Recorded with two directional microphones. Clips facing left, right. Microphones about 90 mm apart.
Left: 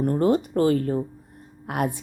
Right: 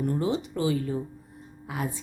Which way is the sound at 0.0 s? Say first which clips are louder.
Left 6 dB; 50° left (ahead or behind).